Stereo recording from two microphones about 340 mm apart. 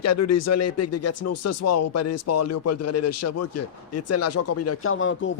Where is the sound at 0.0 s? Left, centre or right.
Left.